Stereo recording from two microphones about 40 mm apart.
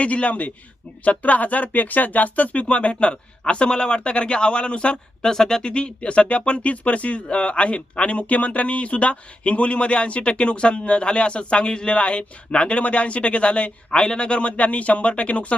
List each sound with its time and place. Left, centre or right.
0.0 s speech: left
5.3 s speech: centre; by 15.5 s left